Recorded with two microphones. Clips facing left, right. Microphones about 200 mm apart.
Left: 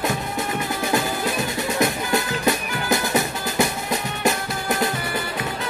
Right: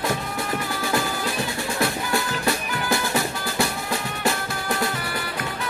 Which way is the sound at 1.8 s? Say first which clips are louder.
Left 2 dB; 20° left (ahead or behind).